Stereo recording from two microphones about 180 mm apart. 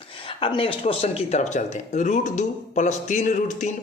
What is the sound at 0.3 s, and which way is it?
A woman's voice, 30° left (ahead or behind).